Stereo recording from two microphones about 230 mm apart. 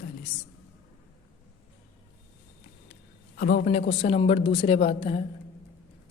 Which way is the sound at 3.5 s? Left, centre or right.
Left.